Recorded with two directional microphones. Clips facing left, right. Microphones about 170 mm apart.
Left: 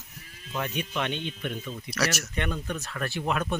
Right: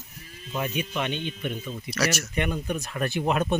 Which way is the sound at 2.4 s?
15° right (ahead or behind).